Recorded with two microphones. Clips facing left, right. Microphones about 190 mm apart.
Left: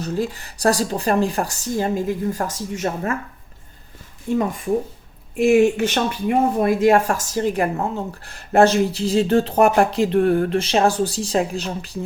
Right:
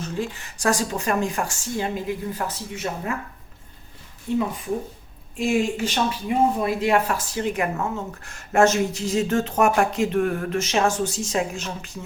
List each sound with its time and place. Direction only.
0.0 s speech: 35° left (ahead or behind)
5.4 s speech: 65° left (ahead or behind); by 11.9 s 35° left (ahead or behind)